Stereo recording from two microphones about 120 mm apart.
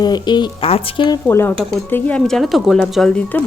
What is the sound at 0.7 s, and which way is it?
Speech, 50° left (ahead or behind).